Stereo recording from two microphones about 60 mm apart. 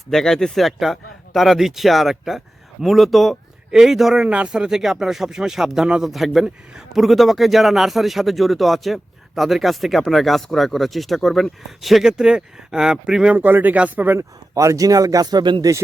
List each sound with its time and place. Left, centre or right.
0.1 s speech: centre
4.2 s speech: centre
13.3 s speech: right
14.2 s speech: right